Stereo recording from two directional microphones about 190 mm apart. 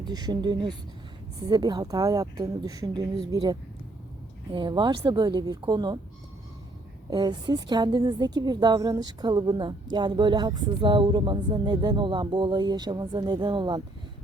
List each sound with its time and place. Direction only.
0.0 s a woman's voice: 20° right (ahead or behind)
7.1 s a woman's voice: 20° right (ahead or behind)